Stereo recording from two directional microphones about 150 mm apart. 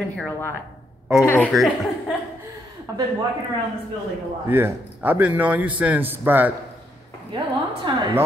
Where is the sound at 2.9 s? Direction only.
25° right (ahead or behind).